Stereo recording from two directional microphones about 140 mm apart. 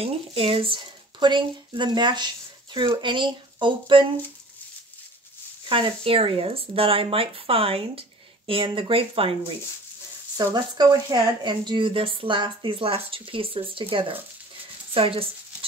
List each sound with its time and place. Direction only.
0.0 s speech: 45° right (ahead or behind)
5.7 s speech: 40° right (ahead or behind)
10.3 s speech: 30° right (ahead or behind)